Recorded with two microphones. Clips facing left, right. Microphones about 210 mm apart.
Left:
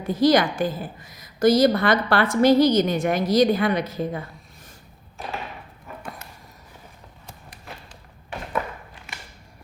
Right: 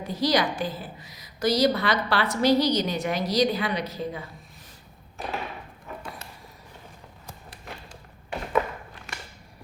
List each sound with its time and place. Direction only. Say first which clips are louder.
0.1 s a woman's voice: left 6 dB; 50° left (ahead or behind)